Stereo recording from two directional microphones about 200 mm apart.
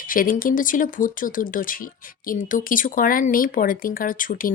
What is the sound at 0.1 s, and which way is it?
Speech, 45° left (ahead or behind).